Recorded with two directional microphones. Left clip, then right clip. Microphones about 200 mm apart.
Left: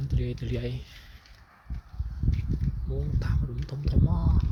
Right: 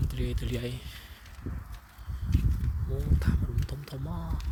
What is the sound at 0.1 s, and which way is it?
Speech, 10° right (ahead or behind).